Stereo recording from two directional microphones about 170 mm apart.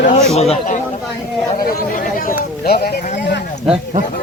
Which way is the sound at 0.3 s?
40° left (ahead or behind).